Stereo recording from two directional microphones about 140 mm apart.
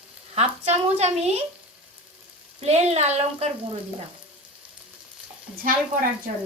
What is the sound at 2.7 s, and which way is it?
Speech, 50° right (ahead or behind).